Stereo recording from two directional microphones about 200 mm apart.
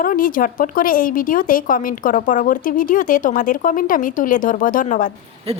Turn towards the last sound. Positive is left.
turn(degrees=40)  # may be behind; listen again after turning